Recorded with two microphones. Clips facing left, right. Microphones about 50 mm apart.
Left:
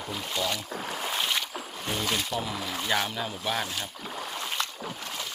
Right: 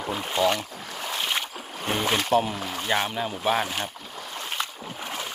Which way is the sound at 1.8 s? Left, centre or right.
Right.